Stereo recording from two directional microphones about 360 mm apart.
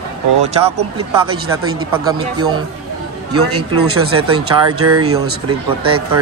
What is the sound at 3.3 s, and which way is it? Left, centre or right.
Speech, right.